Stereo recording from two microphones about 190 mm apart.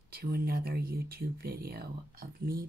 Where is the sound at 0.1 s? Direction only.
55° right (ahead or behind).